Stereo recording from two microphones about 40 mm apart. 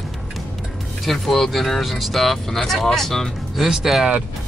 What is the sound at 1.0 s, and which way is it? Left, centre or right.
Speech, centre.